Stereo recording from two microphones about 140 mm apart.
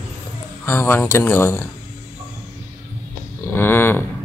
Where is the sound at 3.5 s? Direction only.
15° left (ahead or behind).